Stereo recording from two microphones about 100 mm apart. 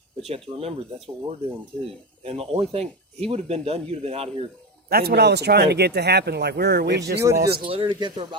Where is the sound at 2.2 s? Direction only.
90° right.